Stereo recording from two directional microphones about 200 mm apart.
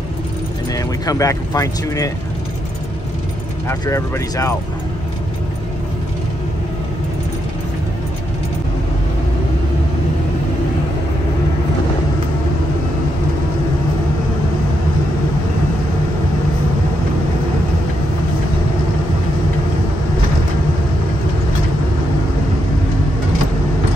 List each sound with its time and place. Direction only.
0.7 s speech: 15° left (ahead or behind)
3.6 s speech: 15° left (ahead or behind)